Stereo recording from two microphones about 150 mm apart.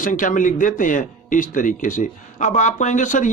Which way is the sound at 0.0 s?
60° left (ahead or behind).